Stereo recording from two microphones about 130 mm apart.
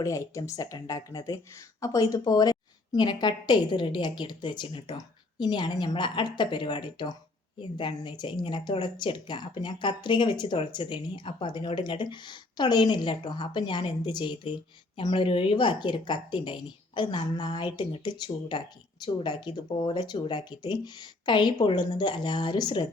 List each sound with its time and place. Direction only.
0.0 s a woman's voice: 25° left (ahead or behind)